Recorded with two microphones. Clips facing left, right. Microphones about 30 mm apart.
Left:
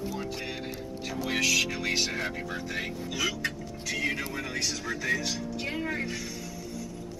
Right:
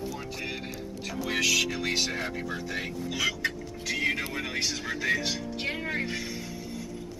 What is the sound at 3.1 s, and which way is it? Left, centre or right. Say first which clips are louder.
A man's voice: right 1 dB; centre.